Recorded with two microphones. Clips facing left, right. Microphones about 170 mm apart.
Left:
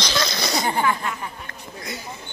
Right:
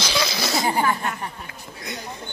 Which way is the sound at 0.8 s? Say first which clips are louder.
Even; 45° right (ahead or behind).